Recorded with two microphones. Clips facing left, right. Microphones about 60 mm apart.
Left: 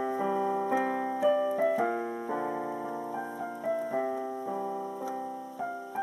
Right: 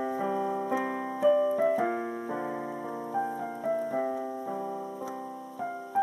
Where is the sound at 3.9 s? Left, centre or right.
Centre.